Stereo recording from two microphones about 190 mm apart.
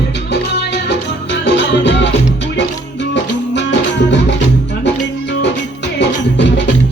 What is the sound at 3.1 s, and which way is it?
Music, 65° left (ahead or behind).